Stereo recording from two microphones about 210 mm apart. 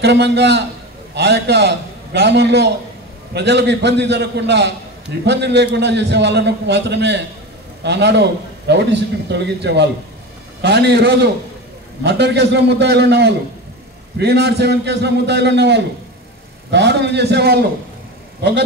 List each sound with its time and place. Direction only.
0.0 s a man's voice: 55° right (ahead or behind)